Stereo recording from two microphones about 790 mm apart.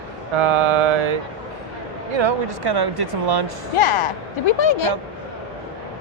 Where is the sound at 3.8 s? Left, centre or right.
Left.